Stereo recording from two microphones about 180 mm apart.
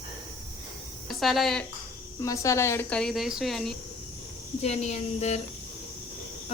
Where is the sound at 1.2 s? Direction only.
Centre (ahead or behind).